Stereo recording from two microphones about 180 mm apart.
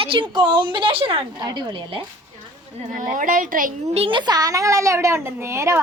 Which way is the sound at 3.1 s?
50° right (ahead or behind).